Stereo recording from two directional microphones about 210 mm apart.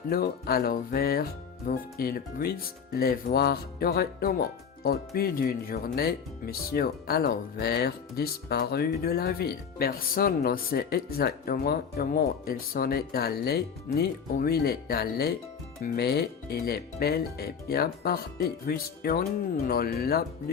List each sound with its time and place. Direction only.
0.1 s speech: 45° left (ahead or behind)